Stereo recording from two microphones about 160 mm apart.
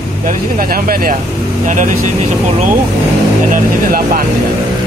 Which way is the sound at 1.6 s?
50° right (ahead or behind).